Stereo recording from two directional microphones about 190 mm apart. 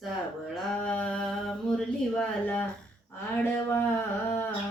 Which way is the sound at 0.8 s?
5° left (ahead or behind).